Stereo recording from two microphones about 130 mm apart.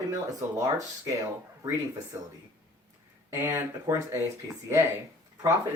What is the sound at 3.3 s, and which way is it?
Speech, 20° right (ahead or behind).